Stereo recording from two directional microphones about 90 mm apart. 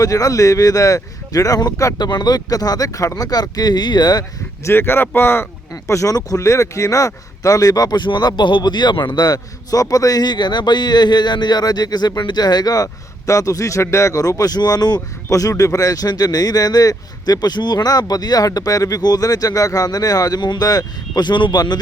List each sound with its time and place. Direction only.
0.0 s speech: 40° left (ahead or behind)
4.6 s speech: 25° left (ahead or behind)
5.7 s speech: 40° left (ahead or behind)